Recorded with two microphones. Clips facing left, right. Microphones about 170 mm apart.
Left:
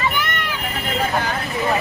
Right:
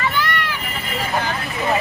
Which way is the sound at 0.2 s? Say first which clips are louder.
Right 2 dB; 20° left (ahead or behind).